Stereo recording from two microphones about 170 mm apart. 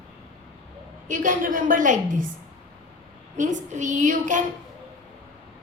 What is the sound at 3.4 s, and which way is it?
A woman's voice, 45° right (ahead or behind).